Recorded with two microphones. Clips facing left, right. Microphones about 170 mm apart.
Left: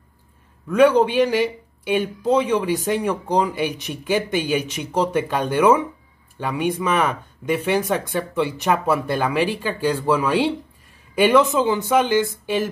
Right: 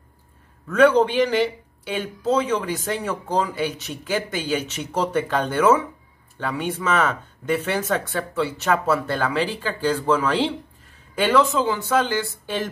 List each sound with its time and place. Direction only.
0.7 s speech: 10° left (ahead or behind)